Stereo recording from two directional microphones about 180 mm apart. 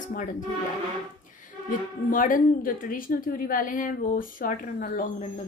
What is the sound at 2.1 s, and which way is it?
Speech, 50° left (ahead or behind).